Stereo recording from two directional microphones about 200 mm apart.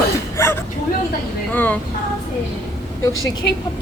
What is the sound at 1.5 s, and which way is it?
Speech, 10° left (ahead or behind).